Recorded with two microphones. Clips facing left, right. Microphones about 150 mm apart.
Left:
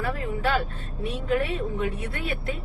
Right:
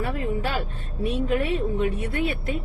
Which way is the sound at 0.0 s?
25° right (ahead or behind).